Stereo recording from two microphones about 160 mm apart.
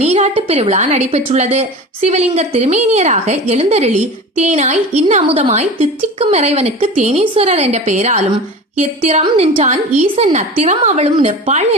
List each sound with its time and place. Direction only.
0.0 s a woman's voice: 40° right (ahead or behind)